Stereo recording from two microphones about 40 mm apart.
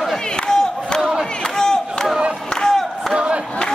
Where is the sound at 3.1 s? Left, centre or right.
Right.